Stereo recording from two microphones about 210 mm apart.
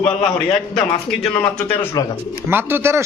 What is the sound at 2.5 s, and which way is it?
Speech, 10° right (ahead or behind).